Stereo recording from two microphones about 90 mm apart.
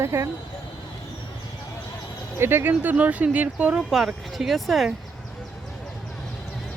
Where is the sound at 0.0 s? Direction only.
30° right (ahead or behind).